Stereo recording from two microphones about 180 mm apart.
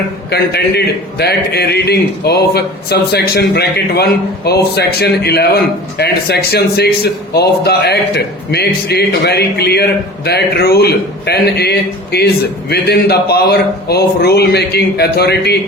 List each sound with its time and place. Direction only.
1.2 s a man's voice: 65° left (ahead or behind)